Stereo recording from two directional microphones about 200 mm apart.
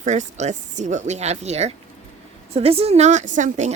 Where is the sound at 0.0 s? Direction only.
35° right (ahead or behind).